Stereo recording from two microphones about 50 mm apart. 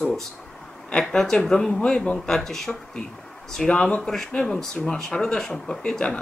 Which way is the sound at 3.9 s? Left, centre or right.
Centre.